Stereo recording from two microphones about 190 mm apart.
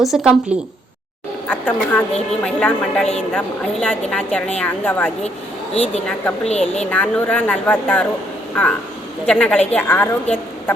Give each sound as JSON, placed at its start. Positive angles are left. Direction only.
{"t": 0.0, "sound": "a woman's voice", "side_deg": 0}
{"t": 1.5, "sound": "a woman's voice", "side_deg": 10}
{"t": 6.5, "sound": "a woman's voice", "side_deg": 35}
{"t": 6.9, "sound": "speech", "side_deg": 5}
{"t": 9.2, "sound": "a woman's voice", "side_deg": 5}